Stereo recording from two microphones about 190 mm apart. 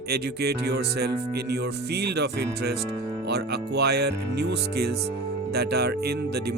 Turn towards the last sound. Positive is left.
turn(degrees=-55)  # may be behind; listen again after turning